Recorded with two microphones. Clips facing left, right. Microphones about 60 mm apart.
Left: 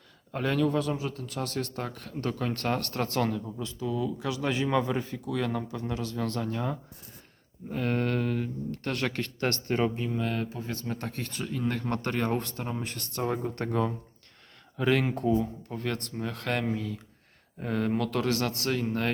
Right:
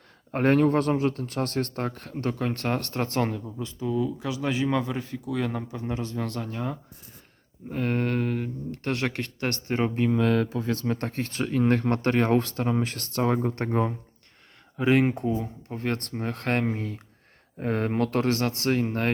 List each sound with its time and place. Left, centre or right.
0.3 s speech: right; by 5.2 s centre
5.2 s speech: centre
5.6 s speech: right
6.1 s speech: centre
7.7 s speech: right
8.8 s speech: right
9.9 s speech: right
13.7 s speech: right
14.8 s speech: right
15.7 s speech: right